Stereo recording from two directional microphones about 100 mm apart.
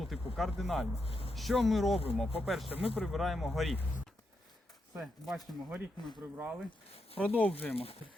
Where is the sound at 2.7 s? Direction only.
75° left (ahead or behind).